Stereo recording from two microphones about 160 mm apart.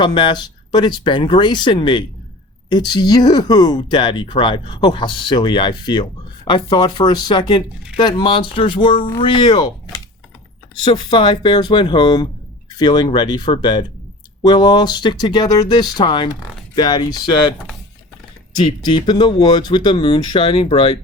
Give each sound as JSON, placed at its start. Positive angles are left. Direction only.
{"t": 0.0, "sound": "speech", "side_deg": 30}
{"t": 18.6, "sound": "speech", "side_deg": 30}